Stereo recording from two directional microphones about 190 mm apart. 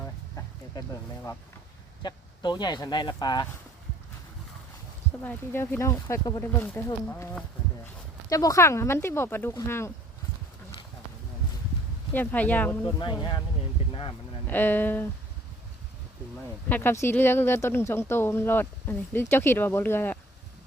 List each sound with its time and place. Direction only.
0.0 s a sound: 15° left (ahead or behind)
2.0 s speech: 25° left (ahead or behind)
5.2 s speech: 10° left (ahead or behind)
12.1 s speech: 10° left (ahead or behind)
12.8 s speech: 25° left (ahead or behind)
13.9 s a sound: 25° left (ahead or behind)
14.4 s speech: 10° left (ahead or behind)
16.6 s speech: 10° left (ahead or behind)